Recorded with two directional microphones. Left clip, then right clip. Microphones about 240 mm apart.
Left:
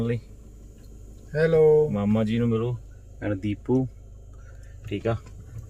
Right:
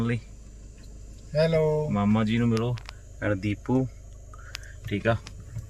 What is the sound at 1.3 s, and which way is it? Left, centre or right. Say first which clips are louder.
Speech: left 2 dB; centre.